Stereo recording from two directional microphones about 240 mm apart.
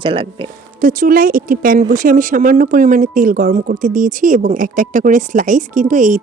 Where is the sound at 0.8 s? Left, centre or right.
Right.